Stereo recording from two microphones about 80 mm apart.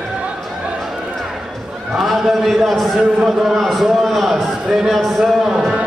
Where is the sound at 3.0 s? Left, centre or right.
Centre.